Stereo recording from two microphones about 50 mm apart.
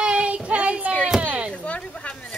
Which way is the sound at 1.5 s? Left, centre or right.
Left.